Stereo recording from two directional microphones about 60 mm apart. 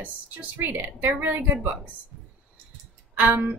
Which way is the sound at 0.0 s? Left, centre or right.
Right.